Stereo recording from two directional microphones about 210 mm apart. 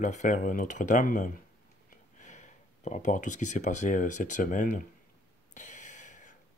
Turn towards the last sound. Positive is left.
turn(degrees=35)  # may be behind; listen again after turning